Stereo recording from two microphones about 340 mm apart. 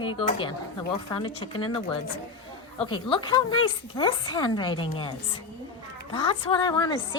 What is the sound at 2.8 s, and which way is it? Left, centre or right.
Speech, centre.